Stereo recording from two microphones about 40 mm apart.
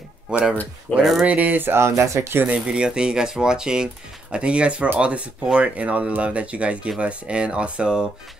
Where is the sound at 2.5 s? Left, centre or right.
Right.